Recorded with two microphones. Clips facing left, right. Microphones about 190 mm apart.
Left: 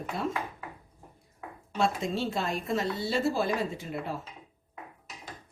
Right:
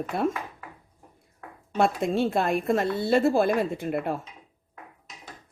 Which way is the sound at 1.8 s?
55° right (ahead or behind).